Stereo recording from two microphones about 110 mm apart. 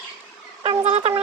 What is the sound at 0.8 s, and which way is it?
Speech, 75° right (ahead or behind).